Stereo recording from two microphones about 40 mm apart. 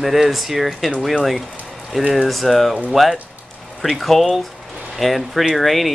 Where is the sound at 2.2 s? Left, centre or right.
Centre.